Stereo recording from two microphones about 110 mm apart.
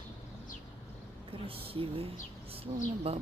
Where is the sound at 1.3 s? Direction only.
55° right (ahead or behind).